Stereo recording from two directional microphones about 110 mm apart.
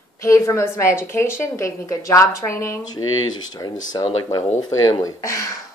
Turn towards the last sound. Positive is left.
turn(degrees=25)  # may be behind; listen again after turning